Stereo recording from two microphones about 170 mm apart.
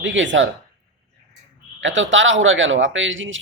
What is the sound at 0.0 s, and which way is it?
Speech, 90° right.